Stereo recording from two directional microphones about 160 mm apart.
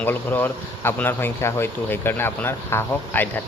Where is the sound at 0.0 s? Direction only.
10° left (ahead or behind).